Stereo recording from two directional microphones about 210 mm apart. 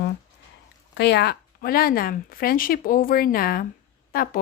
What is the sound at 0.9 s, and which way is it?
Speech, 55° left (ahead or behind).